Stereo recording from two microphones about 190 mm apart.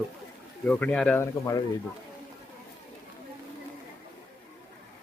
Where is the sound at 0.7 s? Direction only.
5° left (ahead or behind).